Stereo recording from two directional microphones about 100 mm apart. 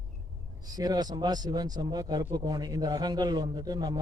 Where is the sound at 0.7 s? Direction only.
40° right (ahead or behind).